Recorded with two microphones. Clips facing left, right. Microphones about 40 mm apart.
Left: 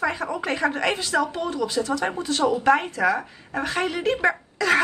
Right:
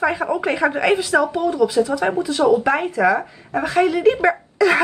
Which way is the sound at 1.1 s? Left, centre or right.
Right.